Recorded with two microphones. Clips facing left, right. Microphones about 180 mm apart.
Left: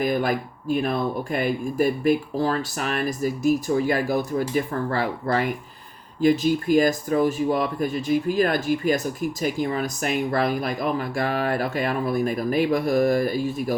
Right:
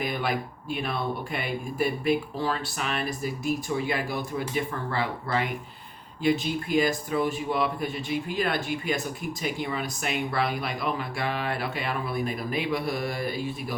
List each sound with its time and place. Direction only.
0.0 s speech: 45° left (ahead or behind)